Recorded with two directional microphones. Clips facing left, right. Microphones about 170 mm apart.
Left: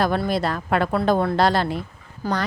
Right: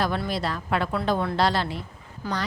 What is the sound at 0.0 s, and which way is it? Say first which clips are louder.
A woman's voice: left 5 dB; 50° left (ahead or behind).